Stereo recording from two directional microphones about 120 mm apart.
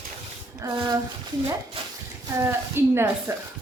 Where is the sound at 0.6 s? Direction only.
30° right (ahead or behind).